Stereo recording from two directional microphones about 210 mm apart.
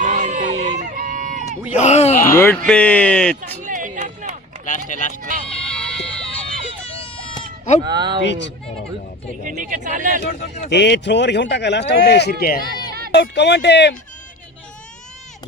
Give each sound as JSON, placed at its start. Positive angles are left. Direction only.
{"t": 0.0, "sound": "crowd", "side_deg": -35}
{"t": 0.8, "sound": "a sound", "side_deg": -40}
{"t": 1.8, "sound": "groan", "side_deg": 30}
{"t": 2.2, "sound": "speech", "side_deg": 10}
{"t": 3.4, "sound": "a sound", "side_deg": -40}
{"t": 4.9, "sound": "speech", "side_deg": 35}
{"t": 5.5, "sound": "a sound", "side_deg": 5}
{"t": 7.9, "sound": "speech", "side_deg": -20}
{"t": 8.2, "sound": "speech", "side_deg": 55}
{"t": 9.4, "sound": "speech", "side_deg": -40}
{"t": 10.7, "sound": "speech", "side_deg": 55}